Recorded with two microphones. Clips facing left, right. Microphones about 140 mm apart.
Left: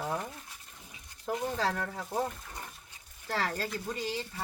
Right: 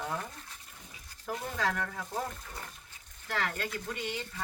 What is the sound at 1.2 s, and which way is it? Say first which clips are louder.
Speech: left 2 dB; 30° left (ahead or behind).